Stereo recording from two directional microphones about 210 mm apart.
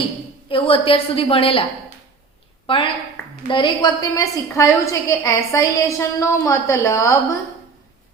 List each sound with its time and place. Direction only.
0.4 s a woman's voice: 25° left (ahead or behind)
2.6 s a woman's voice: 25° left (ahead or behind)